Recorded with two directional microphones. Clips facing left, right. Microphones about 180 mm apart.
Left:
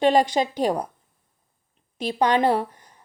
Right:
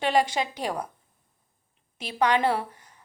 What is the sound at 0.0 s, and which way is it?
Speech, 40° left (ahead or behind).